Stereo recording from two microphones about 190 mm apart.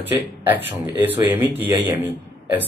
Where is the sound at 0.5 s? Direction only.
10° right (ahead or behind).